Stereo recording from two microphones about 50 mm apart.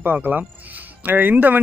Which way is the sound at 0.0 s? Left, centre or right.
Right.